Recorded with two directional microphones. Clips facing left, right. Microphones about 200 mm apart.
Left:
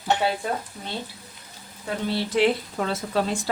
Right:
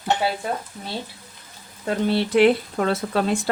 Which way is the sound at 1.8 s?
60° right (ahead or behind).